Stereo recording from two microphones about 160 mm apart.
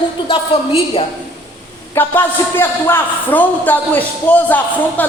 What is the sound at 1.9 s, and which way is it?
A man's voice, 15° left (ahead or behind).